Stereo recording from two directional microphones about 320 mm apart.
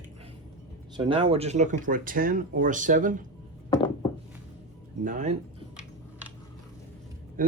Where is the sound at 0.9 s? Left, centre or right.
Centre.